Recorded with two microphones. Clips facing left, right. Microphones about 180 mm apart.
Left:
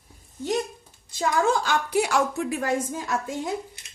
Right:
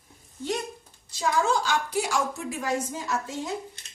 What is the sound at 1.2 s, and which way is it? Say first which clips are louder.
A woman's voice: left 2 dB; 55° left (ahead or behind).